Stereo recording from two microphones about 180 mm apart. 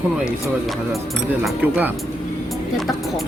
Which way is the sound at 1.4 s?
10° right (ahead or behind).